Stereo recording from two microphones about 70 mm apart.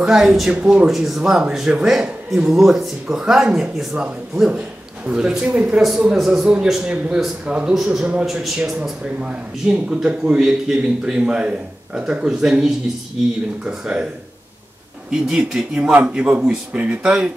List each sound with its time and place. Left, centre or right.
0.0 s speech: centre
0.5 s speech: centre
0.8 s a man's voice: centre
6.1 s speech: centre
6.8 s speech: centre
15.0 s speech: centre